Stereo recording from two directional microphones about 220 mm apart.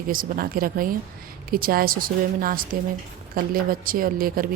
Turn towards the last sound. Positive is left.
turn(degrees=-40)  # may be behind; listen again after turning